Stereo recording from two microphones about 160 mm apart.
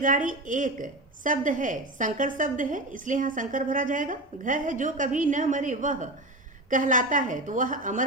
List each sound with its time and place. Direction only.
0.0 s a woman's voice: 55° right (ahead or behind)